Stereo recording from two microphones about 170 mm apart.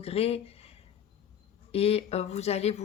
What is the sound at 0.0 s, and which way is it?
Speech, 35° left (ahead or behind).